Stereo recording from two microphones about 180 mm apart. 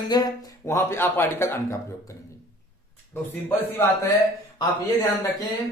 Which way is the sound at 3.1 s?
10° left (ahead or behind).